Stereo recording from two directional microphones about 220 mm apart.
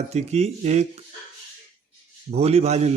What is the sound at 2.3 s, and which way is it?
Speech, 30° right (ahead or behind).